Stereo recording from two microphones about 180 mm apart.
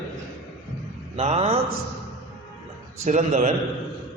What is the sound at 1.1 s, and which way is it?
Speech, 35° right (ahead or behind).